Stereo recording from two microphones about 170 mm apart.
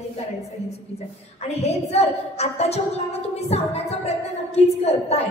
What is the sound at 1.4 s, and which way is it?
A woman's voice, 40° left (ahead or behind).